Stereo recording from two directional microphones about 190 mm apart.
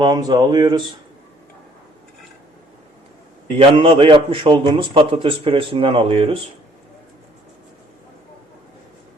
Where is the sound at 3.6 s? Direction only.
25° right (ahead or behind).